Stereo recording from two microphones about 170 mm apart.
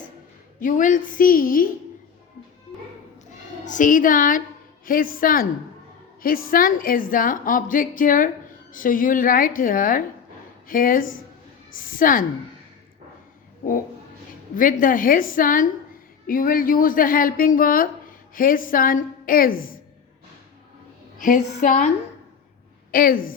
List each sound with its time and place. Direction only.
0.6 s a woman's voice: 50° left (ahead or behind)
3.7 s a woman's voice: 50° left (ahead or behind)
14.5 s a woman's voice: 55° left (ahead or behind)
21.2 s a woman's voice: 50° left (ahead or behind)